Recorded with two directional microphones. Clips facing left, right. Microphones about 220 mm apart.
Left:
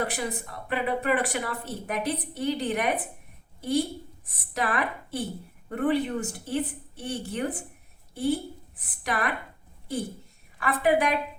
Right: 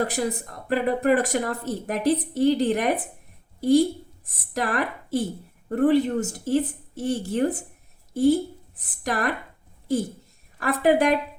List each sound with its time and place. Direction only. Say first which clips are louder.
0.0 s a woman's voice: right 5 dB; 40° right (ahead or behind)
10.6 s a woman's voice: right 4 dB; 45° right (ahead or behind)